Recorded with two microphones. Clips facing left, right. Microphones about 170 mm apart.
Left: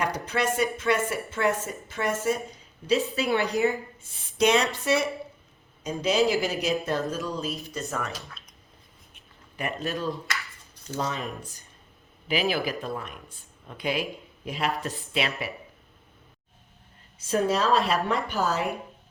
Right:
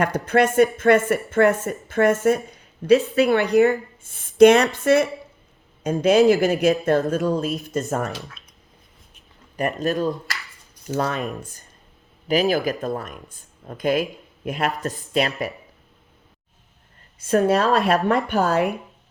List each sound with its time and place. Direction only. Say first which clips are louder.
0.0 s a woman's voice: right 8 dB; 55° right (ahead or behind)
9.6 s speech: right 8 dB; 45° right (ahead or behind)
10.9 s speech: right 6 dB; 60° right (ahead or behind)
12.3 s speech: right 7 dB; 40° right (ahead or behind)
17.2 s speech: right 6 dB; 60° right (ahead or behind)